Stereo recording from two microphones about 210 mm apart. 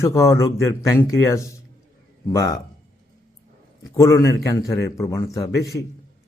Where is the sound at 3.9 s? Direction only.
15° left (ahead or behind).